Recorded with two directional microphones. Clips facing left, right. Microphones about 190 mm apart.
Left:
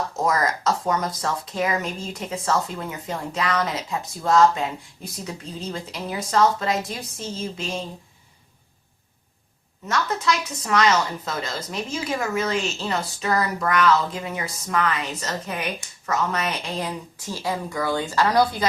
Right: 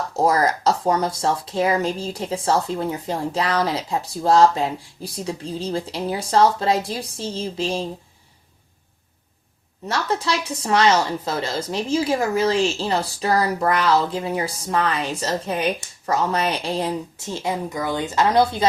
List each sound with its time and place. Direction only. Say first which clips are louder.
0.2 s speech: right 5 dB; 30° right (ahead or behind)
9.8 s speech: even; 30° right (ahead or behind)